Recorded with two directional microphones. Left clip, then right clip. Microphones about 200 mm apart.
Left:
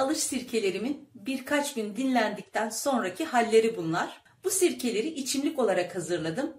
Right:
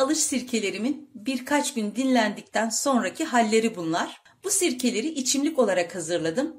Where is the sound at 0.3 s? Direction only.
45° right (ahead or behind).